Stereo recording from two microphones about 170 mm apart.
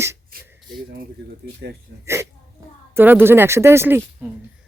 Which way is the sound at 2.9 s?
10° right (ahead or behind).